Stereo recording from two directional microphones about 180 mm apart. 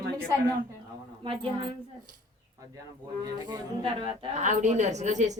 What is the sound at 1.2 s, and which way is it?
Speech, 30° right (ahead or behind).